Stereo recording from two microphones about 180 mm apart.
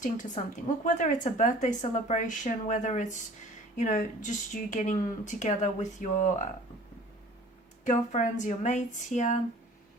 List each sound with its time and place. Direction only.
0.0 s speech: 45° left (ahead or behind)
7.9 s speech: 45° left (ahead or behind)